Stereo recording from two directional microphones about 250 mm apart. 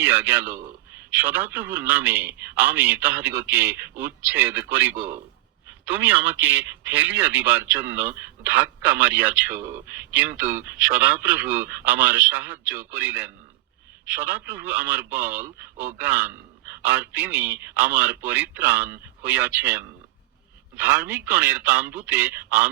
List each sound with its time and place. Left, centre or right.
0.0 s a man's voice: centre